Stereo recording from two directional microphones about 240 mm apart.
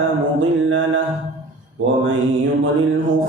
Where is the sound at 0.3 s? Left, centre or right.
Right.